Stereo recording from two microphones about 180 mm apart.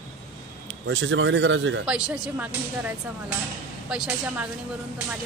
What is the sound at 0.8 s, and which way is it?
Speech, 90° right.